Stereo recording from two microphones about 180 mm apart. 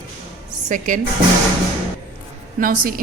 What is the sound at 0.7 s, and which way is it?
Speech, 45° right (ahead or behind).